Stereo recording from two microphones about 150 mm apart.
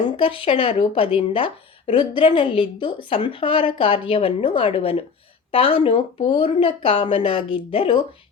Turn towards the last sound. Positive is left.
turn(degrees=40)  # may be behind; listen again after turning